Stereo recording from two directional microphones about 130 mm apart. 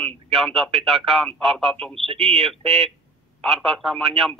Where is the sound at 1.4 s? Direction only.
50° right (ahead or behind).